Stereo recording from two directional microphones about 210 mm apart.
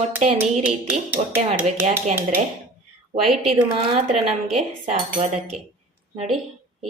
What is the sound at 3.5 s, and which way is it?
Speech, 25° right (ahead or behind).